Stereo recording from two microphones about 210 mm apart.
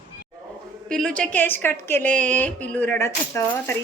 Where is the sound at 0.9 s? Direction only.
5° left (ahead or behind).